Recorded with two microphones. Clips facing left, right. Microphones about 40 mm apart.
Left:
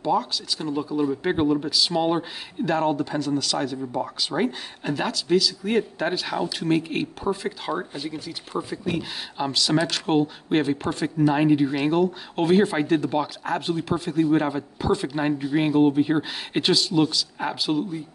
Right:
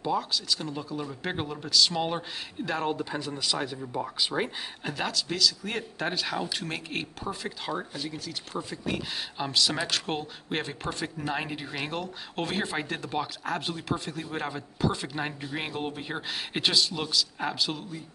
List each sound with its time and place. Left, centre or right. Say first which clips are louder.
0.0 s speech: left 5 dB; centre
3.7 s speech: left 5 dB; centre